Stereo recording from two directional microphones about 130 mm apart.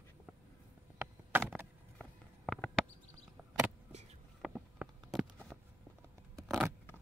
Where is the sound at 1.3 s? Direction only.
15° right (ahead or behind).